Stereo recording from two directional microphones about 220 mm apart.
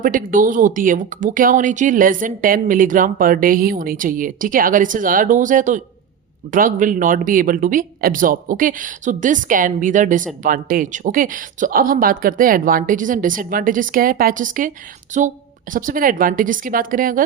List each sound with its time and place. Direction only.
0.0 s speech: 40° right (ahead or behind)